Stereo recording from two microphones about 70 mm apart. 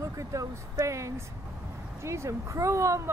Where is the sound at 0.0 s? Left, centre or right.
Right.